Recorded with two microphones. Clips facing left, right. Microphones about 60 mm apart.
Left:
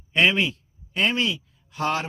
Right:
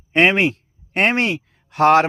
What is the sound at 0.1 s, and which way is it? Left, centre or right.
Speech, right.